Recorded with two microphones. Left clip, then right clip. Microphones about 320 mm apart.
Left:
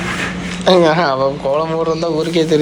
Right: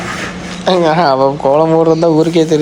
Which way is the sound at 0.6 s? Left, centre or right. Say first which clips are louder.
Left 1 dB; centre.